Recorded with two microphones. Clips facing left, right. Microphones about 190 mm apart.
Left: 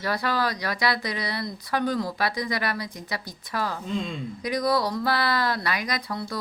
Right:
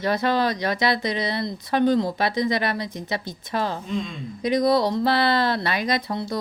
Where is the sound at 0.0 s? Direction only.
20° right (ahead or behind).